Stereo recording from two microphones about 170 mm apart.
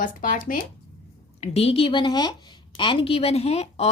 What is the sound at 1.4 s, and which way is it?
A woman's voice, 35° left (ahead or behind).